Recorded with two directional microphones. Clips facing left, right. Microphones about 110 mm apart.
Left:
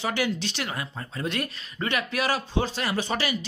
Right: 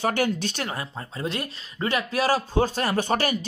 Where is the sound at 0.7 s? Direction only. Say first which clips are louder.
Right 1 dB; 30° right (ahead or behind).